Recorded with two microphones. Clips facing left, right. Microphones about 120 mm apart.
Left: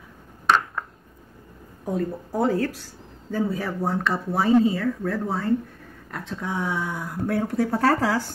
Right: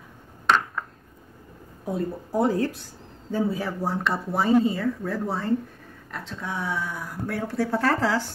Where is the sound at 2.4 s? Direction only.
25° right (ahead or behind).